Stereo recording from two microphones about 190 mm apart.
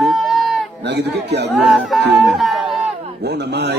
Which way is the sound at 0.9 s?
60° right (ahead or behind).